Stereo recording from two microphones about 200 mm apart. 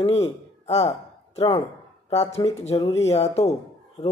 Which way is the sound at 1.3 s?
30° left (ahead or behind).